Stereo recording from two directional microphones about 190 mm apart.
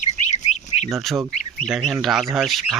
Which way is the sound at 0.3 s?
35° left (ahead or behind).